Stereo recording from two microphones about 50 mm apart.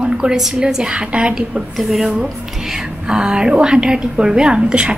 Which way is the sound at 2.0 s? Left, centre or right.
Centre.